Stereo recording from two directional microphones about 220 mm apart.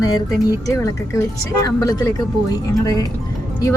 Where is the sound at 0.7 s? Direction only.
15° left (ahead or behind).